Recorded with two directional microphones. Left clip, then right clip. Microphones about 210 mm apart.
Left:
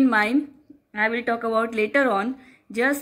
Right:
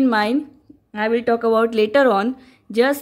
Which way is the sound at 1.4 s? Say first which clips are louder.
Right 6 dB; 40° right (ahead or behind).